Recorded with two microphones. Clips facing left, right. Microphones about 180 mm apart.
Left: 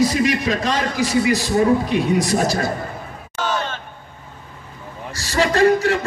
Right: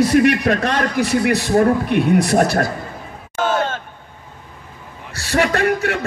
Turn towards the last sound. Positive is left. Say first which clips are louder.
# left 3 dB
turn(degrees=-60)  # may be behind; listen again after turning